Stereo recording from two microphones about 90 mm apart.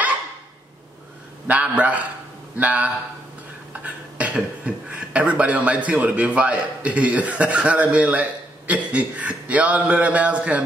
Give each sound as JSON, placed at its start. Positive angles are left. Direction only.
{"t": 1.5, "sound": "speech", "side_deg": -15}